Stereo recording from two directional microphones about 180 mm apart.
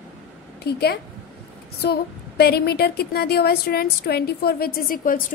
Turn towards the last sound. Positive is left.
turn(degrees=50)  # may be behind; listen again after turning